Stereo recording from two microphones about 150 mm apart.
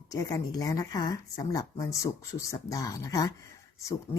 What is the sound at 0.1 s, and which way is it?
Speech, 25° left (ahead or behind).